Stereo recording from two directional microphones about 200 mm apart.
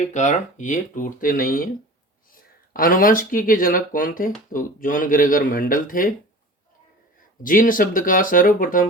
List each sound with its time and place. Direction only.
0.1 s speech: 35° left (ahead or behind)
7.4 s speech: 45° left (ahead or behind)